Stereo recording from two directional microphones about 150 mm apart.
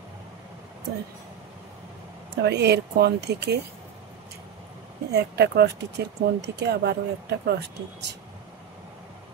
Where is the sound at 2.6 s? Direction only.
90° right.